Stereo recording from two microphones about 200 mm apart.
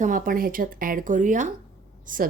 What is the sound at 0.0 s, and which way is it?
Speech, 40° right (ahead or behind).